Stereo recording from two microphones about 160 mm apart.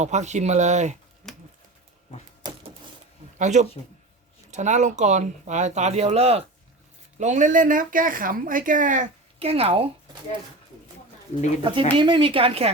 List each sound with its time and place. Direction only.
0.0 s speech: 45° right (ahead or behind)
1.2 s a sound: 5° left (ahead or behind)
2.4 s a sound: 25° right (ahead or behind)
3.3 s speech: 45° right (ahead or behind)
7.2 s speech: 50° right (ahead or behind)
9.4 s a woman's voice: 40° right (ahead or behind)
11.6 s a woman's voice: 30° right (ahead or behind)